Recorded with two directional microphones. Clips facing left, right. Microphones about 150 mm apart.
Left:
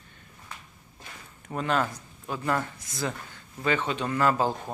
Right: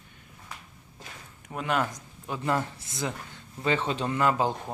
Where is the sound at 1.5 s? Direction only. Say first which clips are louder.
Left 1 dB; 10° right (ahead or behind); by 4.1 s 30° right (ahead or behind).